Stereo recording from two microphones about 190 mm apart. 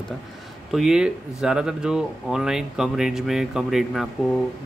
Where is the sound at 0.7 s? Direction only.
Centre (ahead or behind).